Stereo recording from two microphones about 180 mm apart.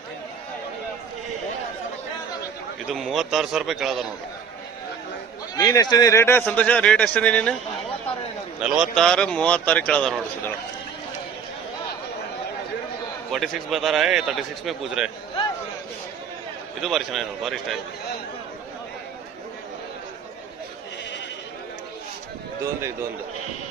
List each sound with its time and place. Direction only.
2.9 s a man's voice: centre (ahead or behind)
5.5 s a man's voice: 20° left (ahead or behind)
8.6 s a man's voice: 5° right (ahead or behind)
13.3 s a man's voice: centre (ahead or behind)
16.8 s a man's voice: centre (ahead or behind)